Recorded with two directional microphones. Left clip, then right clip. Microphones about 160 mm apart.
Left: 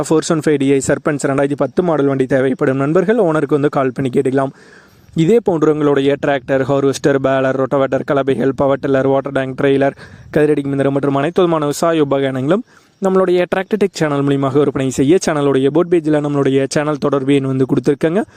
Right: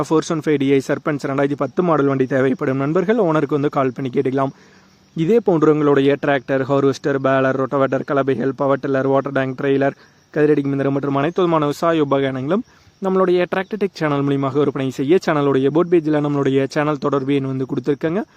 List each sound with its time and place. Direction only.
0.1 s a man's voice: 40° left (ahead or behind)
5.1 s a man's voice: 50° left (ahead or behind)